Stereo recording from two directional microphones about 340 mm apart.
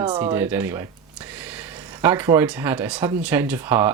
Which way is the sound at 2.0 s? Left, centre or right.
Centre.